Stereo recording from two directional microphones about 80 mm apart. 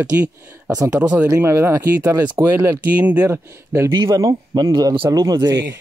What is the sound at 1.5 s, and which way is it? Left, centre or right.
Speech, right.